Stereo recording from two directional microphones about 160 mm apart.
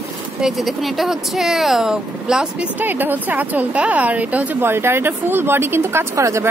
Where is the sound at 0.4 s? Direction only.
Centre (ahead or behind).